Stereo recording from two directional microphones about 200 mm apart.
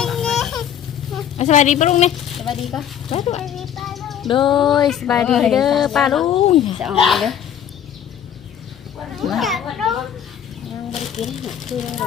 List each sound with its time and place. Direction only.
0.0 s a sound: centre (ahead or behind)
1.4 s a woman's voice: 35° left (ahead or behind)
2.4 s speech: centre (ahead or behind)
3.1 s a woman's voice: 30° left (ahead or behind)
3.4 s a sound: centre (ahead or behind)
4.3 s speech: 25° left (ahead or behind)
4.5 s speech: centre (ahead or behind)
6.2 s speech: 25° left (ahead or behind)
6.7 s speech: centre (ahead or behind)
9.2 s children playing: centre (ahead or behind)
10.9 s speech: centre (ahead or behind)